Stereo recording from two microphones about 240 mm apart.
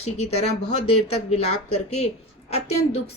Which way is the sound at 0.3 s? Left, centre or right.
Left.